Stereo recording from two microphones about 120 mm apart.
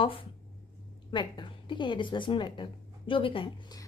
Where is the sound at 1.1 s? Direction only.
40° left (ahead or behind).